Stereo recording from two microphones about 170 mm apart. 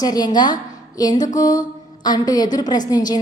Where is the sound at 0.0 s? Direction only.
25° left (ahead or behind).